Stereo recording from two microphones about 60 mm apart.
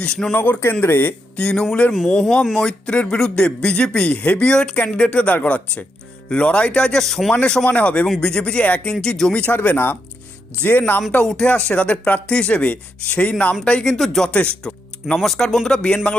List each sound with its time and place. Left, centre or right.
0.0 s speech: centre
0.3 s speech: left
1.4 s speech: centre
1.6 s speech: left
2.0 s speech: centre
7.6 s speech: left; by 9.3 s centre
9.3 s speech: left
11.4 s speech: centre